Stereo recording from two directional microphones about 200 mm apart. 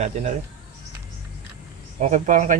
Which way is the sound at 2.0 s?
35° right (ahead or behind).